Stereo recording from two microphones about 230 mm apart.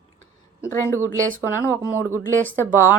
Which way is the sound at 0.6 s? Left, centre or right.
Centre.